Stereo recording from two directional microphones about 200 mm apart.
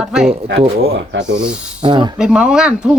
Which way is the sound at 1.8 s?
20° right (ahead or behind).